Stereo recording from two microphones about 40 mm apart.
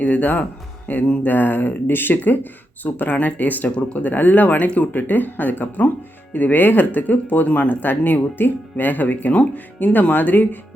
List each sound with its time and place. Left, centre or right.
0.0 s speech: left